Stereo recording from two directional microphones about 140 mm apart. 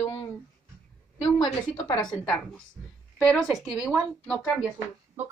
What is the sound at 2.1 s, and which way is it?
Speech, 5° left (ahead or behind).